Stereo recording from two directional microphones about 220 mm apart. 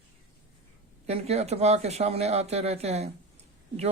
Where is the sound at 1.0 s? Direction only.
30° right (ahead or behind).